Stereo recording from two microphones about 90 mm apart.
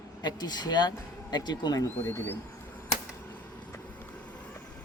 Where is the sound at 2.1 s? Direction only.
25° left (ahead or behind).